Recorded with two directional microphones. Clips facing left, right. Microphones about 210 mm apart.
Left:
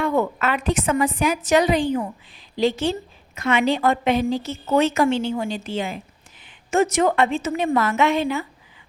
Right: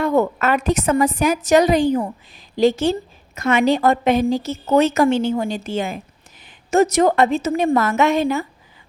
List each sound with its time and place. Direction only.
0.0 s a woman's voice: 40° right (ahead or behind)